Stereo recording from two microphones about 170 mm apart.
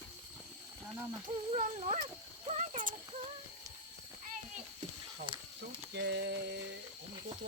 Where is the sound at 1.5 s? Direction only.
40° right (ahead or behind).